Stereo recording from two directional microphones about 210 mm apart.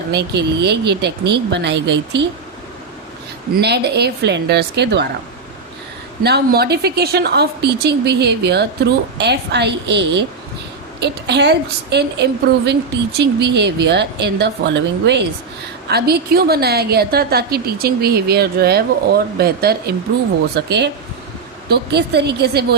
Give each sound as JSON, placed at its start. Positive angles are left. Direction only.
{"t": 0.1, "sound": "a woman's voice", "side_deg": -50}
{"t": 3.6, "sound": "a woman's voice", "side_deg": -50}
{"t": 6.2, "sound": "a woman's voice", "side_deg": -50}
{"t": 11.0, "sound": "a woman's voice", "side_deg": -55}